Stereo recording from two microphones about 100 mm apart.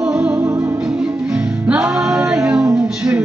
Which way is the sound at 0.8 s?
10° right (ahead or behind).